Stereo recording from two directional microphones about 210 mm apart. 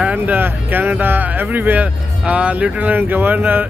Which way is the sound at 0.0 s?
5° right (ahead or behind).